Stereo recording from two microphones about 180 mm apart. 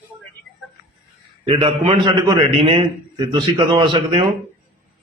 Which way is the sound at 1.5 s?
30° right (ahead or behind).